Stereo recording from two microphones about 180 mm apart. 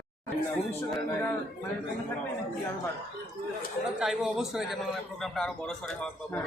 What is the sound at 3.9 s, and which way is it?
A man's voice, 5° right (ahead or behind).